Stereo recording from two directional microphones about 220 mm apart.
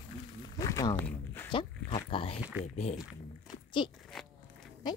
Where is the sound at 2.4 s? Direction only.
5° right (ahead or behind).